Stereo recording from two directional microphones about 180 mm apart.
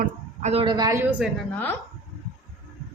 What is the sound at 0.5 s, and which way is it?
Speech, 25° right (ahead or behind).